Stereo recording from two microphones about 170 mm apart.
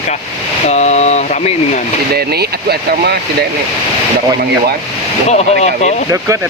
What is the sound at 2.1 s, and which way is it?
Speech, 65° right (ahead or behind).